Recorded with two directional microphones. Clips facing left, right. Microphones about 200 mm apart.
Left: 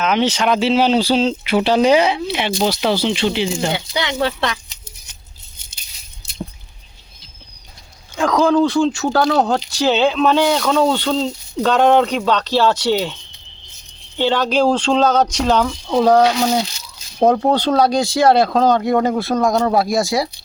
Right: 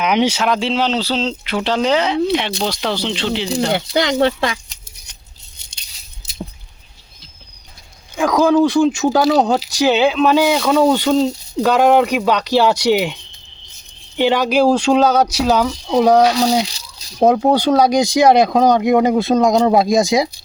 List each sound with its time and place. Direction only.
0.0 s speech: 15° right (ahead or behind); by 3.5 s 10° left (ahead or behind)
3.7 s speech: 50° right (ahead or behind)
8.1 s speech: 10° right (ahead or behind)
14.2 s speech: 10° right (ahead or behind)